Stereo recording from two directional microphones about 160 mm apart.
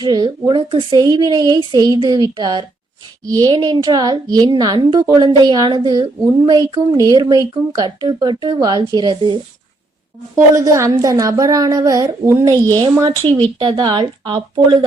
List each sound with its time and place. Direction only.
0.0 s a woman's voice: 25° right (ahead or behind)